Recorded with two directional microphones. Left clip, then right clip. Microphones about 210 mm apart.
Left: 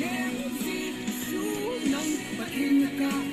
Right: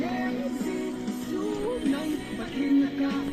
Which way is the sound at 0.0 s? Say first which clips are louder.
Right 1 dB; 15° right (ahead or behind).